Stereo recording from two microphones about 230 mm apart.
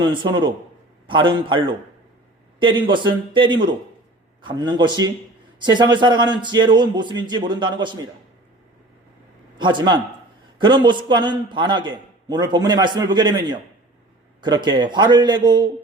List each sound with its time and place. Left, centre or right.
0.0 s a man's voice: right
9.6 s a man's voice: centre